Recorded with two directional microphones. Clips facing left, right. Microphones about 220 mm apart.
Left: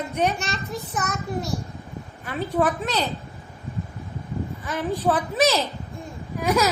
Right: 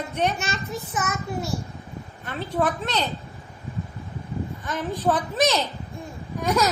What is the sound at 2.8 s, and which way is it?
Speech, 10° left (ahead or behind).